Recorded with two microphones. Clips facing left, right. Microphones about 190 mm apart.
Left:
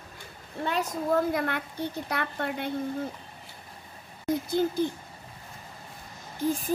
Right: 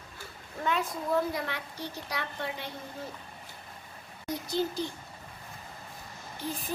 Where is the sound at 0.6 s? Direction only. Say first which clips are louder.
Left 2 dB; 35° left (ahead or behind); by 2.7 s 55° left (ahead or behind).